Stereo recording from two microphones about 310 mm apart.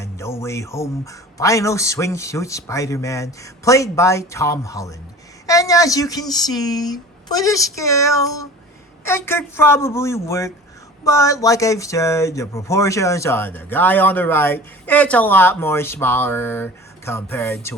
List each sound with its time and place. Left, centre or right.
0.0 s speech: centre